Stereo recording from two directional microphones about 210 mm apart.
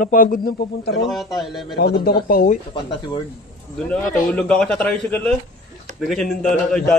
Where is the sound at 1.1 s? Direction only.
Centre (ahead or behind).